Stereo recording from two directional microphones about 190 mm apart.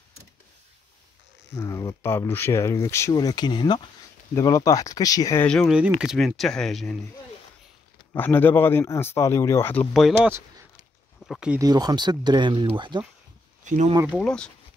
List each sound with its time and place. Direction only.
1.5 s speech: 20° left (ahead or behind)
5.5 s speech: centre (ahead or behind)
8.1 s speech: 10° left (ahead or behind)
9.9 s speech: 5° right (ahead or behind)
11.6 s speech: 20° right (ahead or behind)
13.7 s speech: 40° right (ahead or behind)
13.9 s speech: 10° right (ahead or behind)
14.2 s speech: 5° left (ahead or behind)